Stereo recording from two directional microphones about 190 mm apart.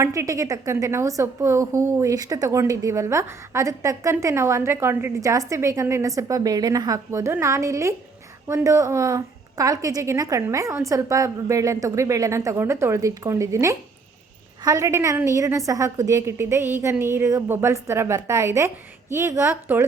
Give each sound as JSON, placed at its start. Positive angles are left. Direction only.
{"t": 0.0, "sound": "a woman's voice", "side_deg": -15}